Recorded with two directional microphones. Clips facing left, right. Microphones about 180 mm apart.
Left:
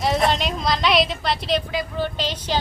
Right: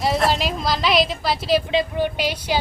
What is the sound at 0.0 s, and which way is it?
A woman's voice, centre (ahead or behind).